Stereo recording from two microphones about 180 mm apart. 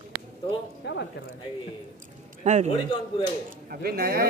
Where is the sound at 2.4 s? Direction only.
40° right (ahead or behind).